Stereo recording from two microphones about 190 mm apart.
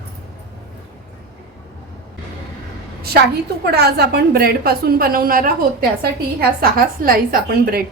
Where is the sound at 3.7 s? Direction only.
60° right (ahead or behind).